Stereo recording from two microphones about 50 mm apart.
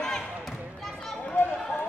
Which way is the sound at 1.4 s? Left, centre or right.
Left.